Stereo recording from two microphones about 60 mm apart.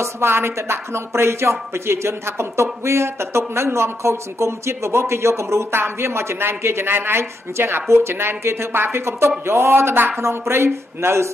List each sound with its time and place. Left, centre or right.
0.0 s speech: right